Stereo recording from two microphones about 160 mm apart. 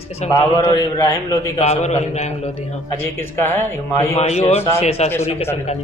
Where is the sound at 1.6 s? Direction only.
45° left (ahead or behind).